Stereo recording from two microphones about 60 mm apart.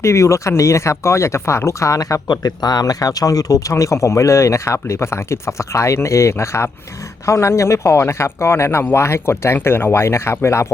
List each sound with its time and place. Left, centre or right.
0.0 s speech: left